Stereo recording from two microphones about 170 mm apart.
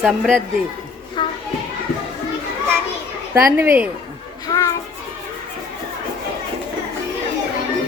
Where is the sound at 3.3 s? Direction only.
15° right (ahead or behind).